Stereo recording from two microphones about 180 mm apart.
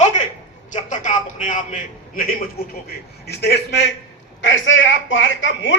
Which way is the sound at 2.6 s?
60° left (ahead or behind).